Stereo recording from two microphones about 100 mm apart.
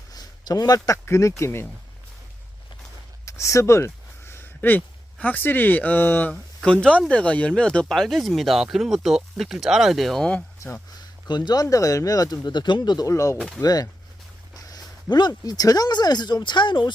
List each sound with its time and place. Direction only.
0.1 s a sound: 40° left (ahead or behind)
1.0 s speech: 25° left (ahead or behind)
3.2 s a sound: 30° left (ahead or behind)
5.2 s speech: 20° left (ahead or behind)
6.3 s speech: 5° left (ahead or behind)
10.6 s speech: 35° left (ahead or behind)
11.3 s speech: 45° left (ahead or behind)
13.1 s speech: 30° left (ahead or behind); by 16.9 s 50° left (ahead or behind)